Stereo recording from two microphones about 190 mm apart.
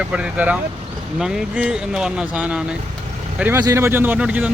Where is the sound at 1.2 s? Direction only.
5° right (ahead or behind).